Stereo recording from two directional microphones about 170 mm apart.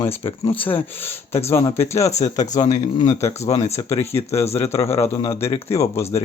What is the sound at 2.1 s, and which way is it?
Speech, 40° left (ahead or behind).